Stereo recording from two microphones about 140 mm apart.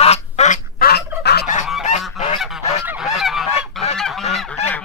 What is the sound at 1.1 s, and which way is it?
Fowl, 15° right (ahead or behind).